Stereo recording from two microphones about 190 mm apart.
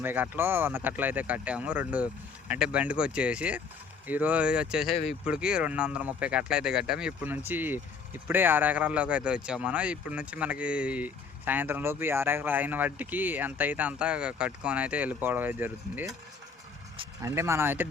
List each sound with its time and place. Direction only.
0.0 s speech: 10° right (ahead or behind)
17.2 s speech: 15° right (ahead or behind)